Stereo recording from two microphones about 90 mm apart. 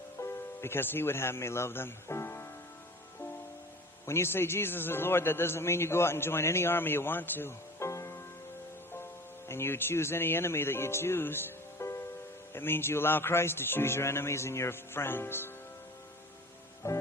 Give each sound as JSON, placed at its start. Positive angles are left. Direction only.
{"t": 0.2, "sound": "speech", "side_deg": 25}
{"t": 4.0, "sound": "a man's voice", "side_deg": 30}
{"t": 9.5, "sound": "a man's voice", "side_deg": 25}
{"t": 16.8, "sound": "music", "side_deg": 30}